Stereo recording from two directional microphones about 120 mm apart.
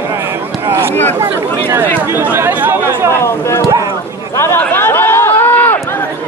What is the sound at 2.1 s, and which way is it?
Speech, 20° right (ahead or behind).